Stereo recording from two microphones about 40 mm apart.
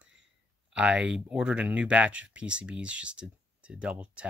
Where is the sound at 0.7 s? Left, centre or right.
Right.